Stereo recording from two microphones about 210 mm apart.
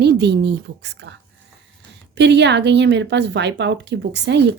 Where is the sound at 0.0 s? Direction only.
55° right (ahead or behind).